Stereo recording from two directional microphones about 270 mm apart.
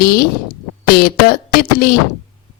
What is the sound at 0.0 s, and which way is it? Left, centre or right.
Speech, left.